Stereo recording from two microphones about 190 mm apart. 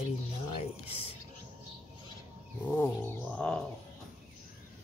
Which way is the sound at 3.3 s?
5° left (ahead or behind).